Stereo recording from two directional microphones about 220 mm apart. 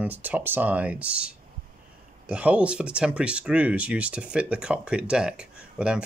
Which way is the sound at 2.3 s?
5° right (ahead or behind).